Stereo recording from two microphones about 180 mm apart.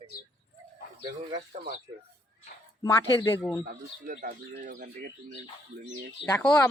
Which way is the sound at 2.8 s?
20° left (ahead or behind).